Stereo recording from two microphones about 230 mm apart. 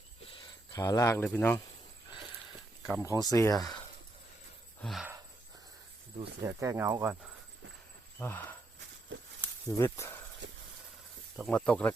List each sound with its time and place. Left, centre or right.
0.3 s speech: centre
3.0 s speech: centre
4.8 s a sound: centre
6.4 s speech: centre
8.2 s speech: centre
9.4 s snake: centre
10.4 s vehicle: right
11.3 s speech: centre